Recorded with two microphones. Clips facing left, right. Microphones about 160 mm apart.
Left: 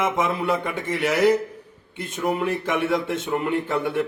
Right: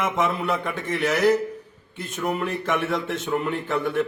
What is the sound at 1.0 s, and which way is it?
Speech, 10° left (ahead or behind).